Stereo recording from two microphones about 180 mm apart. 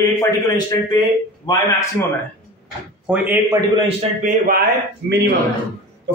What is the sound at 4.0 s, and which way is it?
Speech, 45° right (ahead or behind).